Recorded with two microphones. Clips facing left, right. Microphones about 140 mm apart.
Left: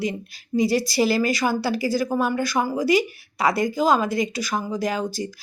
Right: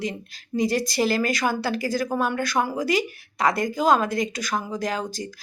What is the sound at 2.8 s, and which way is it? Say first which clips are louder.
Speech: left 7 dB; 45° right (ahead or behind).